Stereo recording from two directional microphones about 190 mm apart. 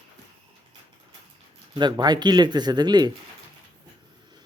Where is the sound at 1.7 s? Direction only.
25° right (ahead or behind).